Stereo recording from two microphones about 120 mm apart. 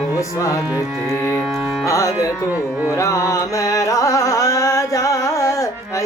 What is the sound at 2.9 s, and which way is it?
Carnatic music, 25° left (ahead or behind).